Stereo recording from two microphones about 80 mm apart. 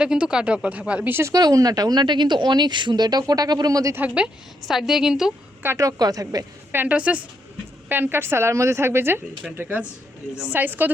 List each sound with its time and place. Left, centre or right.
0.0 s speech: centre
1.3 s speech: right
3.9 s speech: centre
4.7 s a woman's voice: centre
5.7 s a woman's voice: right
6.7 s a woman's voice: right